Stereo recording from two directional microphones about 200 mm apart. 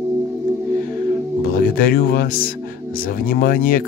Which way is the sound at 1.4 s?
45° left (ahead or behind).